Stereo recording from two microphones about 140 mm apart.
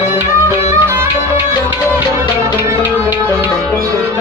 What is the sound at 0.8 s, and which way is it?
Music, 15° right (ahead or behind).